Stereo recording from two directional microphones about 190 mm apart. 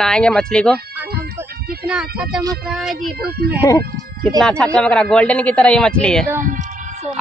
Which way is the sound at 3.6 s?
15° left (ahead or behind).